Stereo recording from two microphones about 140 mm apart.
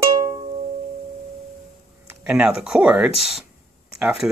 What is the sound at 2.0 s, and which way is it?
Speech, 10° right (ahead or behind).